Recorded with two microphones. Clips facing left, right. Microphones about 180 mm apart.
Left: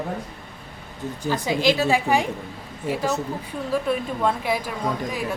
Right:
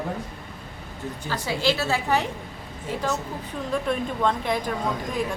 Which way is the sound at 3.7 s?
5° left (ahead or behind).